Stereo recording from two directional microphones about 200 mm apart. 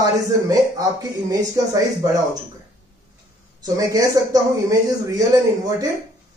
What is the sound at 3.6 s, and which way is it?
Speech, 20° right (ahead or behind).